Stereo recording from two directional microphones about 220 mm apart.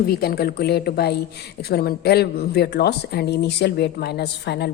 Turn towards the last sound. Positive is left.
turn(degrees=50)  # may be behind; listen again after turning